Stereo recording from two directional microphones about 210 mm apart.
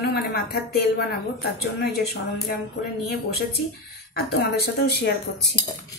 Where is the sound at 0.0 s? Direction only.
50° left (ahead or behind).